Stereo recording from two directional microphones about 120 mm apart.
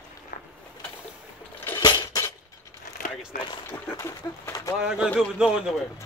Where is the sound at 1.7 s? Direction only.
35° left (ahead or behind).